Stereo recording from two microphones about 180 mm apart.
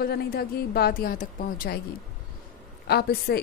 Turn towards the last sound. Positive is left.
turn(degrees=60)  # may be behind; listen again after turning